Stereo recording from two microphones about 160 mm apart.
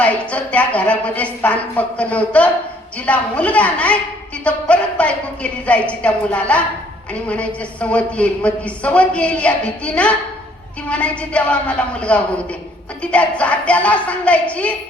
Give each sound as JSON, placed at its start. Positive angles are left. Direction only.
{"t": 0.0, "sound": "speech", "side_deg": 10}